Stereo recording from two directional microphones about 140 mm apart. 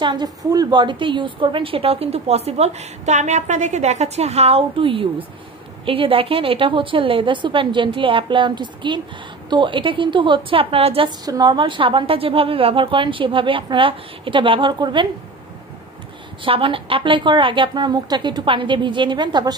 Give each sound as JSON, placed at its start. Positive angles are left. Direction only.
{"t": 0.0, "sound": "a woman's voice", "side_deg": -35}
{"t": 11.1, "sound": "a woman's voice", "side_deg": -30}
{"t": 16.4, "sound": "a woman's voice", "side_deg": -40}